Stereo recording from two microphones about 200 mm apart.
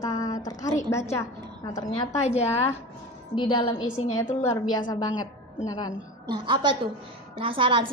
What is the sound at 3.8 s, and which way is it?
Speech, 80° left.